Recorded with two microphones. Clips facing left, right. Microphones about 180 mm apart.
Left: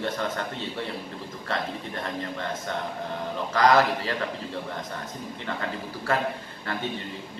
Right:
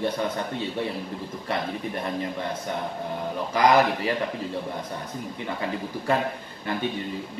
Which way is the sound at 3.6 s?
15° right (ahead or behind).